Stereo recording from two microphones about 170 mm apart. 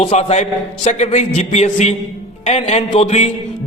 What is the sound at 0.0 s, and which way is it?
A man's voice, 40° left (ahead or behind).